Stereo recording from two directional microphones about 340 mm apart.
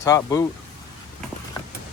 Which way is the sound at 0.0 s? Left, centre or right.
Centre.